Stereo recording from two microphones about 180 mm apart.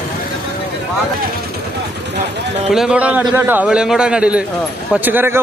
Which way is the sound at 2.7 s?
5° right (ahead or behind).